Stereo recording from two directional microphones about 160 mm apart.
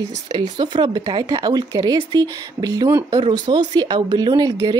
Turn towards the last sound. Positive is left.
turn(degrees=-25)  # may be behind; listen again after turning